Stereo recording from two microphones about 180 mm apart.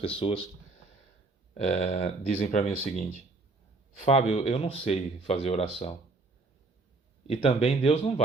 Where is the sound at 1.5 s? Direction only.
35° left (ahead or behind).